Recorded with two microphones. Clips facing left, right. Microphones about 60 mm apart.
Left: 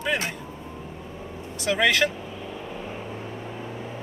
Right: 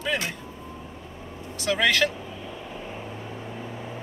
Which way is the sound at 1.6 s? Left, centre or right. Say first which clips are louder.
Left 1 dB; centre.